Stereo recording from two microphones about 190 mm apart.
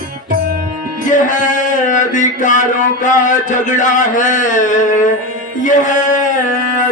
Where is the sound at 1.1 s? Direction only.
40° left (ahead or behind).